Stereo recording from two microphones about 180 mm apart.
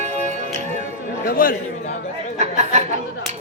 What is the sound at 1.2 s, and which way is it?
Speech, 50° left (ahead or behind).